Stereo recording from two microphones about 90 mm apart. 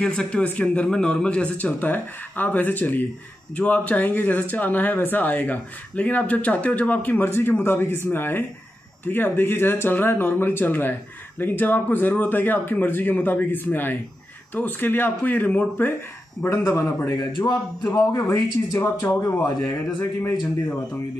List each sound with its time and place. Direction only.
0.0 s speech: 10° left (ahead or behind)
16.4 s a man's voice: 30° left (ahead or behind)
18.7 s a man's voice: 30° left (ahead or behind)